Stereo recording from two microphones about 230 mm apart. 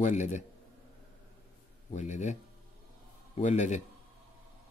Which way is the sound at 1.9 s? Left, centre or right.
Left.